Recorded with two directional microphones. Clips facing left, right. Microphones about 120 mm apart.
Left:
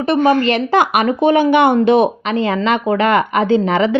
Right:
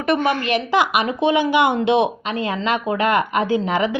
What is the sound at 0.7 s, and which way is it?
Speech, 50° left (ahead or behind).